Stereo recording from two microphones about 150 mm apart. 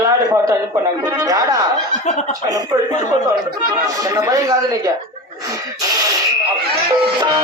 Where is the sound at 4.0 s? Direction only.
20° right (ahead or behind).